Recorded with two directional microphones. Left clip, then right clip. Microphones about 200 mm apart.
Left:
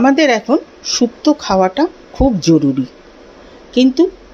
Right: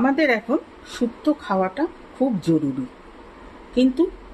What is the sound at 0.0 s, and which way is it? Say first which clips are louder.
Speech: left 8 dB; 20° left (ahead or behind).